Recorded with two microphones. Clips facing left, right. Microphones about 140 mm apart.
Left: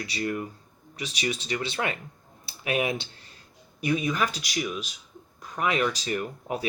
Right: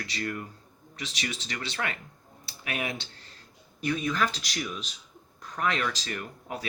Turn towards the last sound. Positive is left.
turn(degrees=20)  # may be behind; listen again after turning